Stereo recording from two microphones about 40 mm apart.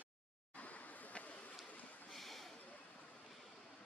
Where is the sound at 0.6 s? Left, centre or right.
Left.